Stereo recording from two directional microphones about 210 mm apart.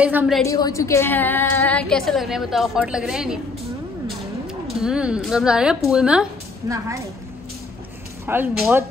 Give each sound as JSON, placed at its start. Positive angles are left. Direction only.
{"t": 0.0, "sound": "speech", "side_deg": -5}
{"t": 0.5, "sound": "a woman's voice", "side_deg": 15}
{"t": 4.6, "sound": "a woman's voice", "side_deg": 0}
{"t": 6.7, "sound": "speech", "side_deg": -15}
{"t": 8.3, "sound": "speech", "side_deg": -5}